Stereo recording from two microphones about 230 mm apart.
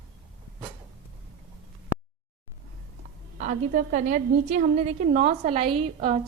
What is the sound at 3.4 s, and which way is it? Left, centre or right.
A woman's voice, right.